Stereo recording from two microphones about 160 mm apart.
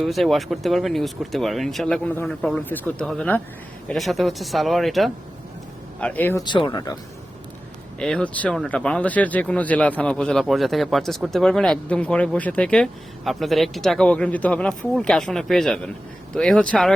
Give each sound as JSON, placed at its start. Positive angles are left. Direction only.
{"t": 0.0, "sound": "speech", "side_deg": 0}
{"t": 6.4, "sound": "speech", "side_deg": 30}
{"t": 7.9, "sound": "speech", "side_deg": 5}